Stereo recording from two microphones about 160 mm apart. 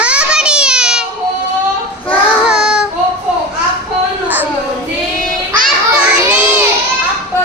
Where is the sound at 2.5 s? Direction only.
5° right (ahead or behind).